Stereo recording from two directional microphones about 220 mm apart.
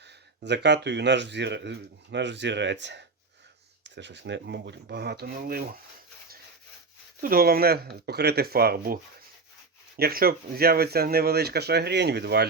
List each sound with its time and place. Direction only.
0.0 s speech: 50° right (ahead or behind)
7.2 s speech: 40° right (ahead or behind)
10.0 s speech: 45° right (ahead or behind)